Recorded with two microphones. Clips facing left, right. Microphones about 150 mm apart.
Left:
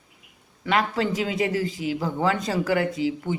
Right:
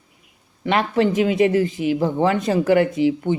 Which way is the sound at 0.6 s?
25° right (ahead or behind).